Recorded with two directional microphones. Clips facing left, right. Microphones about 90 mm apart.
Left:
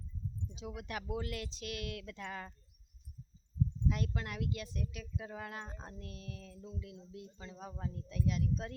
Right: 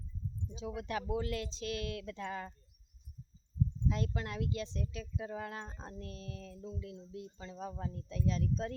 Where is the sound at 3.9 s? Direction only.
25° right (ahead or behind).